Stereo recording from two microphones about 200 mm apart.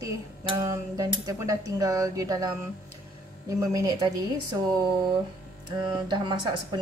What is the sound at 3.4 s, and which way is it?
Speech, 15° right (ahead or behind).